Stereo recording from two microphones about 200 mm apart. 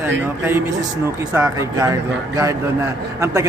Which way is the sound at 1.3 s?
15° right (ahead or behind).